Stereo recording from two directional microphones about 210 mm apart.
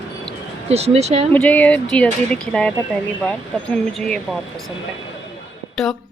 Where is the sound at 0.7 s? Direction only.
30° right (ahead or behind).